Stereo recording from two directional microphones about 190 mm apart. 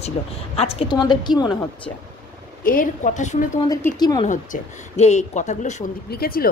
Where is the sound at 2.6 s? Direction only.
45° left (ahead or behind).